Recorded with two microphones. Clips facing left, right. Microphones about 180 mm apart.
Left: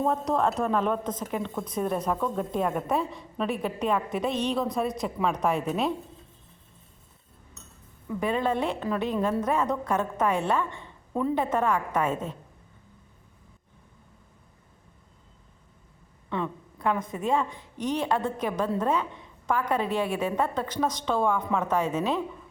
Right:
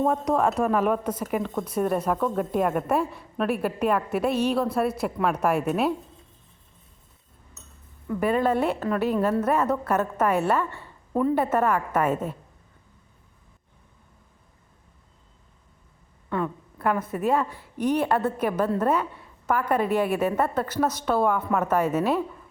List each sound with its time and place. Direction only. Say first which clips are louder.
0.1 s a woman's voice: right 2 dB; 10° right (ahead or behind)
8.2 s a woman's voice: right 4 dB; 5° right (ahead or behind)
10.7 s a woman's voice: even; 15° left (ahead or behind)
11.1 s a woman's voice: right 4 dB; 5° right (ahead or behind)
16.8 s a woman's voice: right 3 dB; 5° right (ahead or behind)